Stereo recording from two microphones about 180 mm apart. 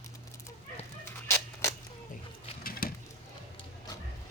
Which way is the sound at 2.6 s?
55° left (ahead or behind).